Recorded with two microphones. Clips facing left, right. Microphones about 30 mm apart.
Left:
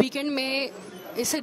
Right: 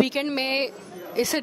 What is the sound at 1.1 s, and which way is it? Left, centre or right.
Speech, right.